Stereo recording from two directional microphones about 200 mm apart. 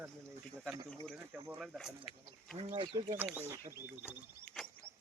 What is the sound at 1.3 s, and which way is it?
Speech, 10° right (ahead or behind).